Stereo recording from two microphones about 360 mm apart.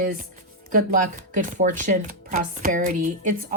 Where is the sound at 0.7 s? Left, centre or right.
Right.